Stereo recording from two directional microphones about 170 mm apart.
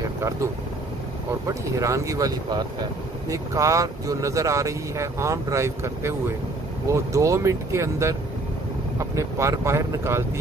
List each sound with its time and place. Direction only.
1.5 s speech: 20° right (ahead or behind)